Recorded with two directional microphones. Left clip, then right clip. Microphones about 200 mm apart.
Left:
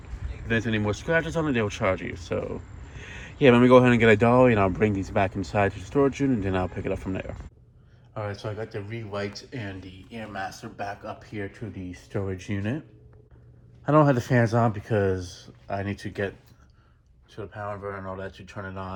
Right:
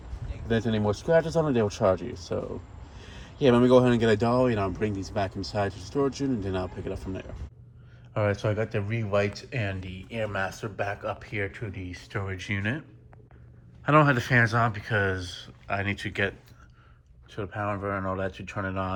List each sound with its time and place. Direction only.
0.4 s speech: 20° right (ahead or behind)
8.2 s speech: 5° left (ahead or behind)
11.3 s speech: 25° left (ahead or behind)
13.8 s speech: 25° left (ahead or behind)
17.3 s speech: 10° left (ahead or behind)